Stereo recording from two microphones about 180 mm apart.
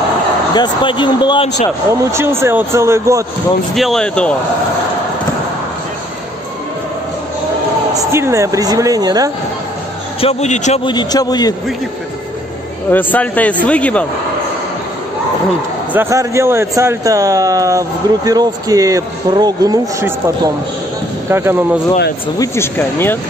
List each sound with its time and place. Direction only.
0.6 s speech: 25° left (ahead or behind)
1.9 s speech: 15° right (ahead or behind)
3.7 s speech: centre (ahead or behind)
7.9 s speech: 15° right (ahead or behind)
10.2 s a man's voice: 40° left (ahead or behind)
10.8 s speech: 25° left (ahead or behind)
12.9 s speech: 10° left (ahead or behind)
15.9 s speech: 15° right (ahead or behind)
22.4 s speech: 15° left (ahead or behind)